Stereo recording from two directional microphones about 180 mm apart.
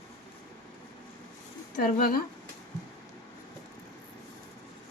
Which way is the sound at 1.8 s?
50° left (ahead or behind).